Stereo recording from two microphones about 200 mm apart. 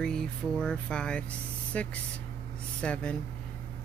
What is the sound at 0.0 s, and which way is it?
A man's voice, 5° left (ahead or behind).